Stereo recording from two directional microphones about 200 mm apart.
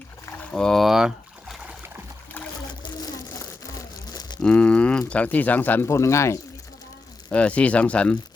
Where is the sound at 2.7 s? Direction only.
20° left (ahead or behind).